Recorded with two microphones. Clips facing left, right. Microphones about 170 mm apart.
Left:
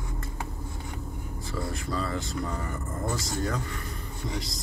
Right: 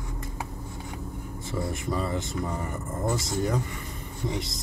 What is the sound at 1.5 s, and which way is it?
Vehicle, 20° right (ahead or behind).